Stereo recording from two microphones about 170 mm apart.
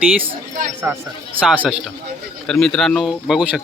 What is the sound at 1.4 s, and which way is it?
Speech, 10° right (ahead or behind).